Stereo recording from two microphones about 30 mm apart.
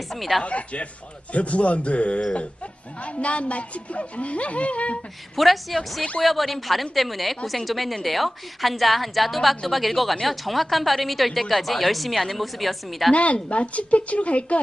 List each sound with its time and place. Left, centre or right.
0.1 s a woman's voice: centre
0.4 s a woman's voice: left
5.4 s a woman's voice: centre
13.1 s a woman's voice: left